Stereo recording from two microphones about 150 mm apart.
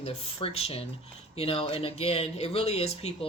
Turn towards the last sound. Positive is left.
turn(degrees=45)  # may be behind; listen again after turning